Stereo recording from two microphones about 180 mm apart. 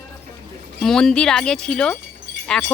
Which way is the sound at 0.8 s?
5° left (ahead or behind).